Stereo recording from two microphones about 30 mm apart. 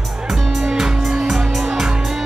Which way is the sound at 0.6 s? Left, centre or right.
Right.